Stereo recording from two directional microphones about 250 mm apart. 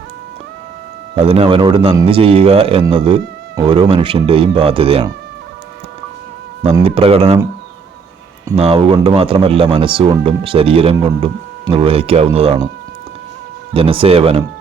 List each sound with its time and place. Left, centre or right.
1.1 s speech: right
6.6 s speech: right
8.5 s speech: right
13.7 s speech: right